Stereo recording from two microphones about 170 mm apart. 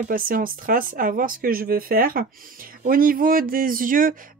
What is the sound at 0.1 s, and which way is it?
Speech, 55° right (ahead or behind).